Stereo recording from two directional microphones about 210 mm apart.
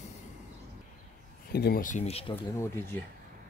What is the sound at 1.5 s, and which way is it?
Speech, 50° left (ahead or behind).